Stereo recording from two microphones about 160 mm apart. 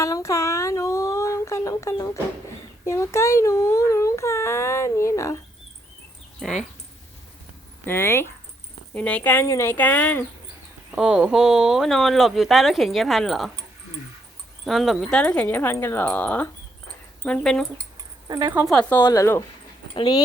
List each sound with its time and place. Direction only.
0.0 s a sound: 20° left (ahead or behind)
2.8 s speech: 15° left (ahead or behind)
6.4 s speech: centre (ahead or behind)
7.9 s speech: 15° left (ahead or behind)
10.9 s speech: 5° right (ahead or behind)
14.6 s speech: centre (ahead or behind)
18.3 s speech: 25° right (ahead or behind)
18.6 s speech: 5° left (ahead or behind)
19.0 s speech: 20° left (ahead or behind)